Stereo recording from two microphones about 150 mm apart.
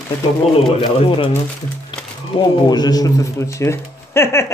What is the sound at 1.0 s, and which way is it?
Speech, 35° left (ahead or behind).